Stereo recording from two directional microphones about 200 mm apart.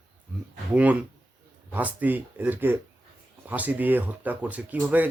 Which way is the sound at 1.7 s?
10° right (ahead or behind).